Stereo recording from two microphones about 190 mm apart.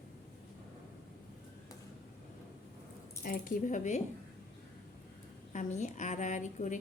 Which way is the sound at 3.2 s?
45° left (ahead or behind).